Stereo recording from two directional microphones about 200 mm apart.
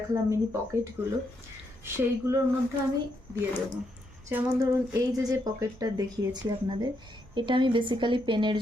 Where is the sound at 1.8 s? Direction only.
10° right (ahead or behind).